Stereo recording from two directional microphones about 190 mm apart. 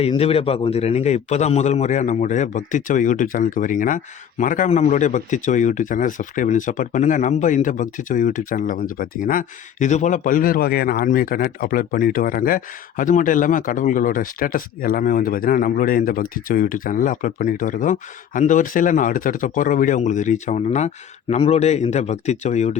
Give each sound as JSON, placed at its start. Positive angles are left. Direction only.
{"t": 0.0, "sound": "a man's voice", "side_deg": 30}